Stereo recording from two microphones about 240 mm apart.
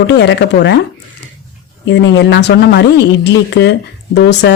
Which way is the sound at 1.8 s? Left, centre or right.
Left.